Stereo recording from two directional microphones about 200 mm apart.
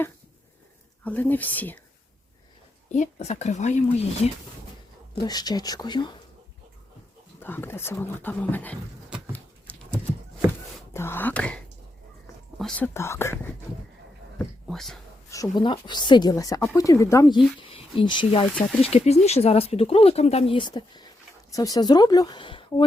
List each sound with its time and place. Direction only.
1.0 s speech: 10° left (ahead or behind)
2.9 s speech: 35° left (ahead or behind)
5.2 s speech: 20° left (ahead or behind)
7.3 s speech: 10° left (ahead or behind)
9.3 s a sound: 5° left (ahead or behind)
10.9 s speech: 10° left (ahead or behind)
15.3 s speech: 20° left (ahead or behind)